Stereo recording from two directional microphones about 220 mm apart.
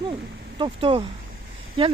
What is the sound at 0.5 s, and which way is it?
Speech, 25° right (ahead or behind).